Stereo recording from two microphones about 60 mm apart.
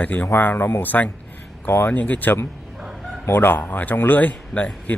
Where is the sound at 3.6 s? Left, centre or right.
Left.